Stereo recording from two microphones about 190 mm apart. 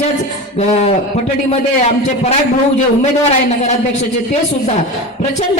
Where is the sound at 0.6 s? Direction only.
35° left (ahead or behind).